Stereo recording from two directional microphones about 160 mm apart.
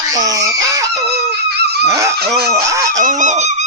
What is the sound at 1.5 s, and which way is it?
Dog, 90° right.